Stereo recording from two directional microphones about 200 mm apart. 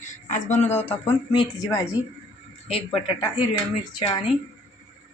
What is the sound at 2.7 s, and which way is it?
Speech, 25° left (ahead or behind).